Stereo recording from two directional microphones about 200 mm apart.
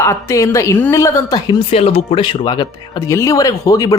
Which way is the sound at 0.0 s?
15° left (ahead or behind).